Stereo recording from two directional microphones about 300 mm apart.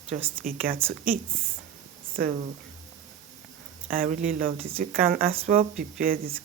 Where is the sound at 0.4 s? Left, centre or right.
Right.